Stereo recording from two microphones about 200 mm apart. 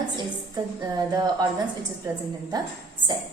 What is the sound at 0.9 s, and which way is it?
Speech, 20° right (ahead or behind).